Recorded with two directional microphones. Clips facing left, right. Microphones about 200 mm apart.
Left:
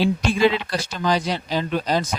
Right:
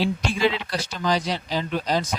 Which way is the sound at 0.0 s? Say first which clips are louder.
Left 4 dB; 55° left (ahead or behind).